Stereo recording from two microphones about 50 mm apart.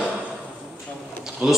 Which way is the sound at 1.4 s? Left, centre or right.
Right.